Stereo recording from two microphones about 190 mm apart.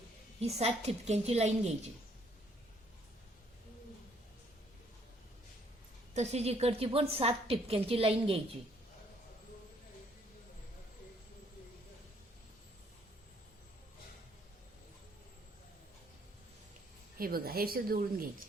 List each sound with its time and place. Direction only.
0.3 s a woman's voice: 35° right (ahead or behind)
6.1 s a woman's voice: 35° right (ahead or behind)
17.2 s a woman's voice: 50° right (ahead or behind)